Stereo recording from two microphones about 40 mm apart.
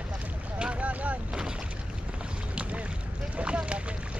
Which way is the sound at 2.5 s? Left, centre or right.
Right.